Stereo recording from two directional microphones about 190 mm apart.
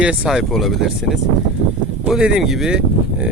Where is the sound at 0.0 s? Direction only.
5° right (ahead or behind).